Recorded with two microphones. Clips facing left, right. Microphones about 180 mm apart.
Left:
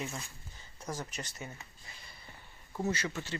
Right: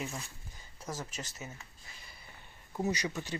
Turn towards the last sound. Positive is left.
turn(degrees=-15)  # may be behind; listen again after turning